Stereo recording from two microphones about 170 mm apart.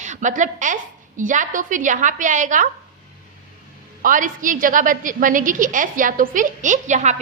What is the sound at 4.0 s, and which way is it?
A woman's voice, 50° right (ahead or behind).